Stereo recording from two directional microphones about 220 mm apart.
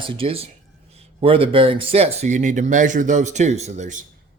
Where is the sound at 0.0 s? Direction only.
25° right (ahead or behind).